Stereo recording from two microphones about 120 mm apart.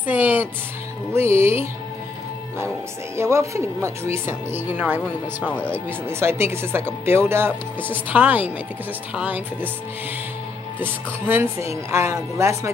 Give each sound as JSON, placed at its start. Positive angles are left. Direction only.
{"t": 0.0, "sound": "music", "side_deg": -15}
{"t": 3.2, "sound": "speech", "side_deg": -25}
{"t": 5.4, "sound": "speech", "side_deg": 10}
{"t": 6.0, "sound": "speech", "side_deg": -20}
{"t": 10.8, "sound": "speech", "side_deg": -20}